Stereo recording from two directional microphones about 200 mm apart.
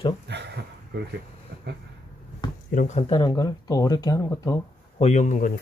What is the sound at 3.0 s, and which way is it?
Speech, 20° left (ahead or behind).